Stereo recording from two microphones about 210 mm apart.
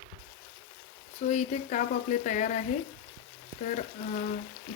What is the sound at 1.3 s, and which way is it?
Speech, 35° left (ahead or behind).